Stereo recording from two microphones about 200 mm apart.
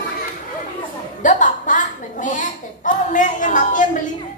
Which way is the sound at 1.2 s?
40° left (ahead or behind).